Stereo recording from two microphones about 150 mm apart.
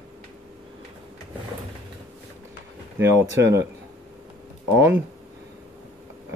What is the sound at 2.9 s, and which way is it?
Speech, 20° right (ahead or behind).